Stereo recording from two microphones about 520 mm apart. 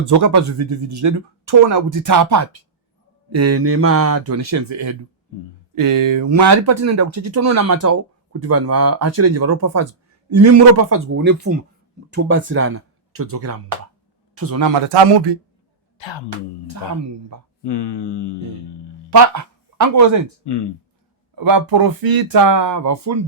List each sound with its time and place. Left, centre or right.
0.0 s a man's voice: right
16.0 s speech: left
17.7 s speech: left
19.1 s speech: right
20.4 s speech: left
21.3 s speech: right